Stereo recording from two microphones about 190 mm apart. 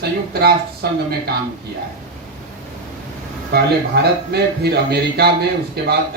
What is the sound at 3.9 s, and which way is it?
Speech, 55° right (ahead or behind).